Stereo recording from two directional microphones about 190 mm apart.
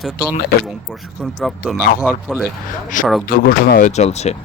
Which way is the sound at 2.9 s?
45° left (ahead or behind).